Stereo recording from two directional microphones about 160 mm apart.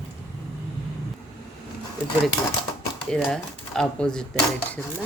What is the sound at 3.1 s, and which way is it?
Speech, 5° left (ahead or behind).